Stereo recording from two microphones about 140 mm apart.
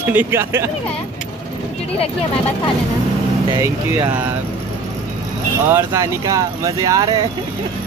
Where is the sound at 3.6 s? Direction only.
25° right (ahead or behind).